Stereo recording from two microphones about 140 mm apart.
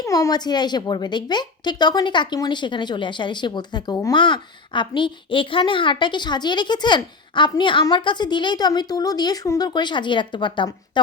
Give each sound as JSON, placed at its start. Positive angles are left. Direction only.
{"t": 0.0, "sound": "a woman's voice", "side_deg": 25}